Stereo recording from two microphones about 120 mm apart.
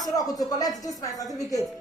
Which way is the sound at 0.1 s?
30° left (ahead or behind).